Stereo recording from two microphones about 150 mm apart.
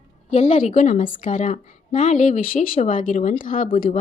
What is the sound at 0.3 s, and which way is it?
A woman's voice, 50° left (ahead or behind).